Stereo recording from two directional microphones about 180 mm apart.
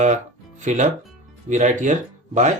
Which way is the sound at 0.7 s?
40° right (ahead or behind).